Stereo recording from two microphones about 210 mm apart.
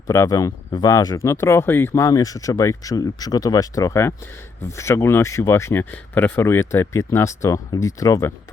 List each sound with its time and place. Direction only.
0.1 s speech: 15° left (ahead or behind)